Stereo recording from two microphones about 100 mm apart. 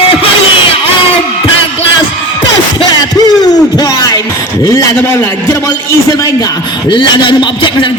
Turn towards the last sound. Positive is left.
turn(degrees=50)  # may be behind; listen again after turning